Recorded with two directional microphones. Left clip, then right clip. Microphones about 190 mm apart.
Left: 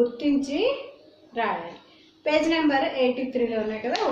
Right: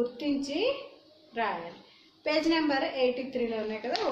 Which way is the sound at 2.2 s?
15° right (ahead or behind).